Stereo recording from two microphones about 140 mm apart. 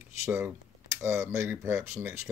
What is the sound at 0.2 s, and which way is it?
Speech, 20° right (ahead or behind).